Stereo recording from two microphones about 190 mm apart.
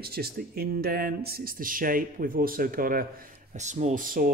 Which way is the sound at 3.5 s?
40° right (ahead or behind).